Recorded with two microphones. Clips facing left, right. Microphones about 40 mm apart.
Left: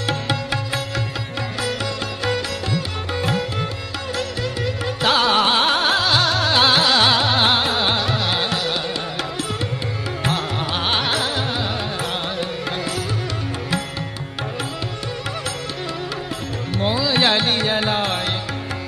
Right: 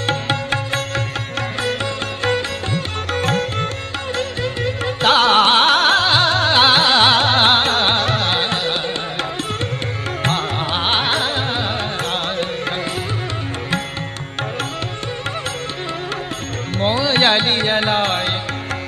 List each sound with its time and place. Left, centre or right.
0.0 s music: right
2.2 s music: right
3.1 s sitar: right
4.1 s music: right
10.6 s carnatic music: right
12.0 s music: right
16.9 s music: right
17.2 s carnatic music: right